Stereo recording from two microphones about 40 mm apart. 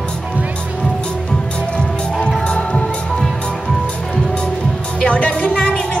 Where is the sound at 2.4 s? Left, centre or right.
Left.